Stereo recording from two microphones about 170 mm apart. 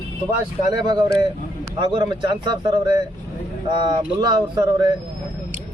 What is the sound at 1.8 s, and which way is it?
A man's voice, 25° right (ahead or behind).